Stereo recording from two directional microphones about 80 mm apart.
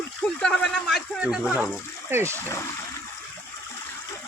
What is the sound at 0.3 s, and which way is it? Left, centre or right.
Speech, centre.